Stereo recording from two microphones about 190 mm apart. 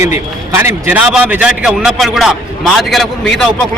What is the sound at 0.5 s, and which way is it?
A man's voice, 10° right (ahead or behind).